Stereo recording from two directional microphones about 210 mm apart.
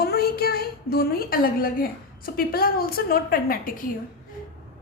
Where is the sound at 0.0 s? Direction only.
45° left (ahead or behind).